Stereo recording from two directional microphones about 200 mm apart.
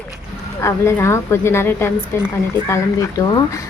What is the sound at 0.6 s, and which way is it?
Speech, 15° left (ahead or behind).